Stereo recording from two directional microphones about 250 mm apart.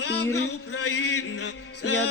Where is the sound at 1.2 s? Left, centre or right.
Left.